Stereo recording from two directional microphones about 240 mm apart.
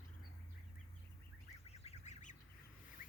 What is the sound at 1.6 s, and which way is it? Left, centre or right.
Duck, left.